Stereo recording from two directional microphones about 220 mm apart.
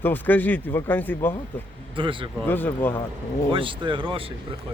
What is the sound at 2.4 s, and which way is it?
Speech, 10° left (ahead or behind).